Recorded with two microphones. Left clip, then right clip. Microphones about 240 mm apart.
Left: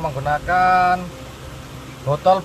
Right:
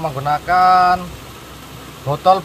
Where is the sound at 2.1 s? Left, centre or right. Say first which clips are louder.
Right 2 dB; right.